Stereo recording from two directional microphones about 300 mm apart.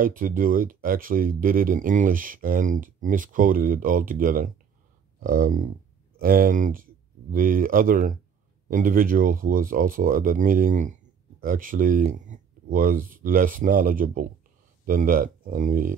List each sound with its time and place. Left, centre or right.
0.0 s speech: right